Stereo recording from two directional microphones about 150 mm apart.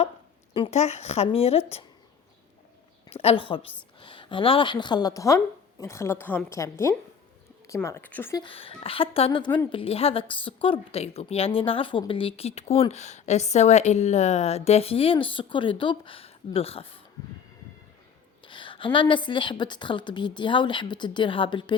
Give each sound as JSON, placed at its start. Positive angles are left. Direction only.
{"t": 0.5, "sound": "speech", "side_deg": 40}
{"t": 3.1, "sound": "a woman's voice", "side_deg": 40}
{"t": 8.4, "sound": "a woman's voice", "side_deg": 35}
{"t": 18.4, "sound": "a woman's voice", "side_deg": 35}